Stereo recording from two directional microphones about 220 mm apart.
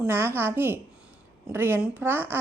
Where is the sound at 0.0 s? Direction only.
10° right (ahead or behind).